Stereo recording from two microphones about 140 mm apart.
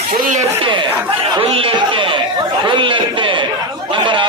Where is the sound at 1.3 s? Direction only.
40° right (ahead or behind).